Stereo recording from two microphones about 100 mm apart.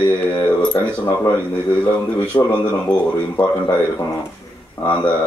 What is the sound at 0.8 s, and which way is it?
Speech, 20° left (ahead or behind).